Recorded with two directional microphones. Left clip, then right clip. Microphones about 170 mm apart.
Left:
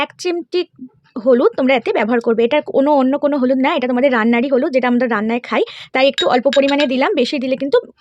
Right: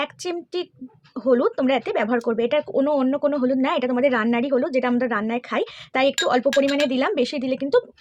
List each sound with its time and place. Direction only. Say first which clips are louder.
0.0 s speech: left 7 dB; 55° left (ahead or behind)